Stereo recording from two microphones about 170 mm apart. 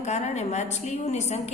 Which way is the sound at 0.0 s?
40° left (ahead or behind).